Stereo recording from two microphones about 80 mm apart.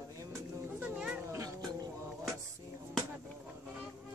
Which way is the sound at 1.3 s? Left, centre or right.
Right.